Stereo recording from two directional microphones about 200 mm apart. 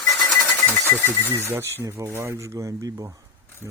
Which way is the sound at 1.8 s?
15° right (ahead or behind).